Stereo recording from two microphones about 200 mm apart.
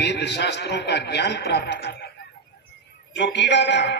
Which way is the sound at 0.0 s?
55° left (ahead or behind).